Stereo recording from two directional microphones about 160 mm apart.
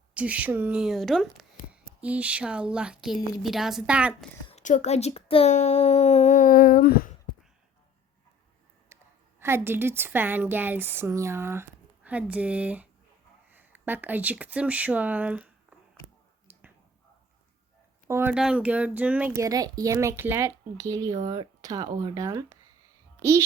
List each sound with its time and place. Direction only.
0.1 s speech: 10° right (ahead or behind)
4.6 s speech: 50° left (ahead or behind); by 7.1 s 65° left (ahead or behind)
8.9 s a sound: 15° right (ahead or behind)
9.4 s speech: 15° right (ahead or behind)
16.5 s finger snapping: 10° right (ahead or behind)
18.1 s speech: 15° right (ahead or behind)